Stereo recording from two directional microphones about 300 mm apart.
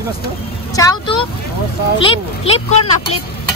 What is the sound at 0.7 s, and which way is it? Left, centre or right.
Speech, centre.